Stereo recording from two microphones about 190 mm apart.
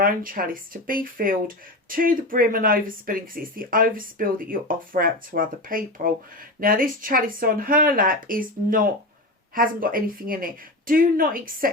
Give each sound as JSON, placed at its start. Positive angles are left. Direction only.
{"t": 0.0, "sound": "speech", "side_deg": -50}